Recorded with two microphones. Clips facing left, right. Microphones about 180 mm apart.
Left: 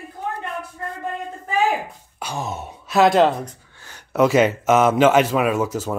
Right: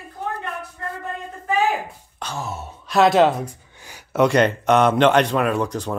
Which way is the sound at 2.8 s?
Centre (ahead or behind).